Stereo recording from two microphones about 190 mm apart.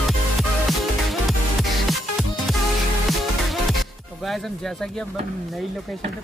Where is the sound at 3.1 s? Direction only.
Centre (ahead or behind).